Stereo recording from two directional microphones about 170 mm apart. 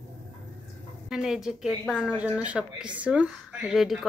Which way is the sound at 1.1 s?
Centre (ahead or behind).